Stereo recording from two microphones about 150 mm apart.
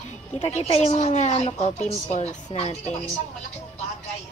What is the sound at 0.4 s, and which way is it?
Speech, 45° left (ahead or behind).